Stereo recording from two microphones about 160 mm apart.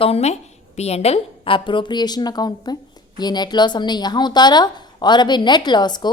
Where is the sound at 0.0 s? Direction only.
40° left (ahead or behind).